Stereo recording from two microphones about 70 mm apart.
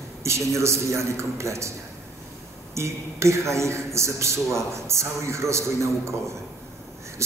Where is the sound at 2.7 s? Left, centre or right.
Right.